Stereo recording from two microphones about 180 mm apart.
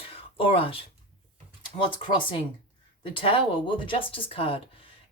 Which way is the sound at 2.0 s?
25° left (ahead or behind).